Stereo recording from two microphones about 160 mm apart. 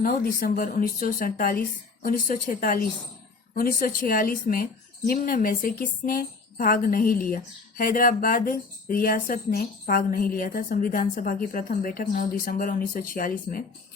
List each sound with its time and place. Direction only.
0.0 s a woman's voice: 60° left (ahead or behind)